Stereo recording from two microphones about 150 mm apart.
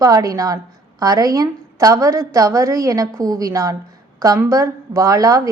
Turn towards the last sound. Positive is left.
turn(degrees=-25)  # may be behind; listen again after turning